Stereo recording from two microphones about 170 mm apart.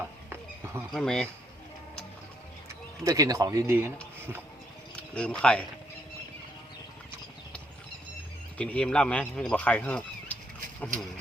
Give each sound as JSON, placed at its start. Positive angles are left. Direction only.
{"t": 0.0, "sound": "a sound", "side_deg": -15}
{"t": 0.9, "sound": "speech", "side_deg": 5}
{"t": 3.0, "sound": "speech", "side_deg": -20}
{"t": 5.1, "sound": "speech", "side_deg": 5}
{"t": 8.5, "sound": "speech", "side_deg": 5}